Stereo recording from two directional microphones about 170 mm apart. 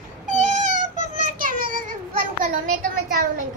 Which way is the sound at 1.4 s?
55° right (ahead or behind).